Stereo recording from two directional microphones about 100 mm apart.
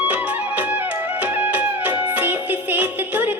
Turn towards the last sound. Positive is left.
turn(degrees=-20)  # may be behind; listen again after turning